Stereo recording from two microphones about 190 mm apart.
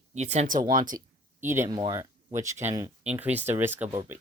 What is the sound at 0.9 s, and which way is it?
Speech, 15° right (ahead or behind).